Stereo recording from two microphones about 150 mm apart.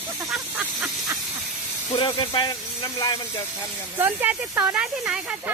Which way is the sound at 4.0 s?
15° right (ahead or behind).